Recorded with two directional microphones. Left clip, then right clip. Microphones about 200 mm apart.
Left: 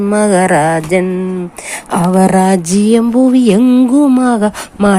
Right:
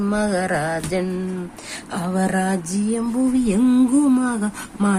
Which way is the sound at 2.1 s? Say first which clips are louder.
Left 11 dB; 25° left (ahead or behind).